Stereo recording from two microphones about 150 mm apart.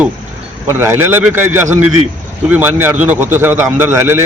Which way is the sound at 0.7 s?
15° right (ahead or behind).